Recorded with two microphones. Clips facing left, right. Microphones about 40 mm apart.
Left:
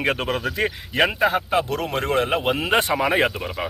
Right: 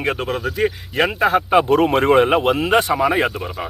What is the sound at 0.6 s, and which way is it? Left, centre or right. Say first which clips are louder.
Speech: right 4 dB; left.